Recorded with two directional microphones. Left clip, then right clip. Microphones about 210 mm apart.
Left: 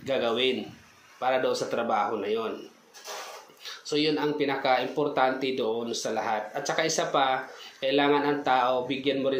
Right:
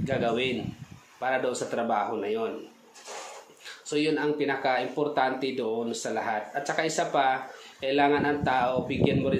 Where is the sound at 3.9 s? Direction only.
5° left (ahead or behind).